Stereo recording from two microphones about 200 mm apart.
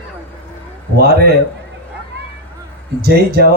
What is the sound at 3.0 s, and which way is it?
Speech, 50° right (ahead or behind).